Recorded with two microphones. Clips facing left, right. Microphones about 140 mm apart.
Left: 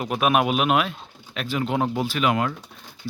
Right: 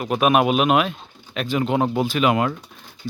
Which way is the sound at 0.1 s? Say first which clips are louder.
Right 4 dB; centre (ahead or behind).